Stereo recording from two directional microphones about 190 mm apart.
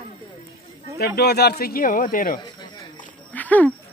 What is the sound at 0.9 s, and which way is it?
Speech, 60° left (ahead or behind).